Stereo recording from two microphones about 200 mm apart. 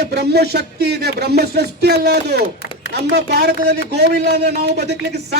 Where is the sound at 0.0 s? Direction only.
55° right (ahead or behind).